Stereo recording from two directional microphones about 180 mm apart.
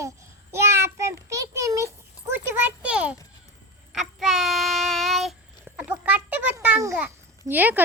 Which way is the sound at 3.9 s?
Centre (ahead or behind).